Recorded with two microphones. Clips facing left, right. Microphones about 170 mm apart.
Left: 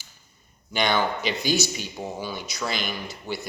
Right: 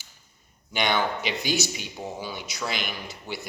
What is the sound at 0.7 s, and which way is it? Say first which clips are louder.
Speech: left 2 dB; 15° right (ahead or behind).